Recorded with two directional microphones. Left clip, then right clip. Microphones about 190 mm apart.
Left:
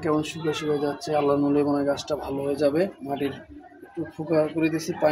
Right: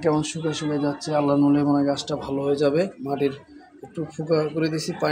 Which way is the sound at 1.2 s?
35° right (ahead or behind).